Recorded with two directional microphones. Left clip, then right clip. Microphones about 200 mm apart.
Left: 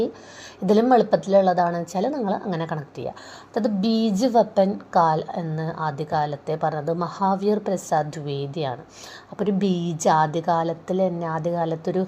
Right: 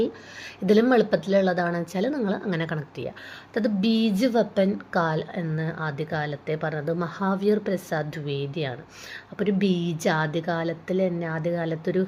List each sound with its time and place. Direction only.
0.6 s a woman's voice: 5° right (ahead or behind)